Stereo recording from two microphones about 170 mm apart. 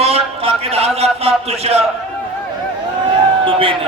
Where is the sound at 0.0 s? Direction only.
35° right (ahead or behind).